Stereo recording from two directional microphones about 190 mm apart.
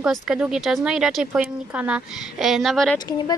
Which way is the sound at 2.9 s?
20° left (ahead or behind).